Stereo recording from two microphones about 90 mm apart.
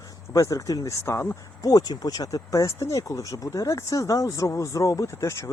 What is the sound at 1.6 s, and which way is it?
Speech, 45° left (ahead or behind).